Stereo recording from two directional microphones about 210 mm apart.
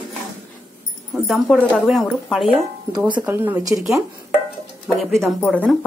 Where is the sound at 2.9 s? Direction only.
20° right (ahead or behind).